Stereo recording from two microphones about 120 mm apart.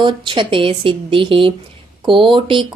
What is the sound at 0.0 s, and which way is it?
Speech, 40° right (ahead or behind).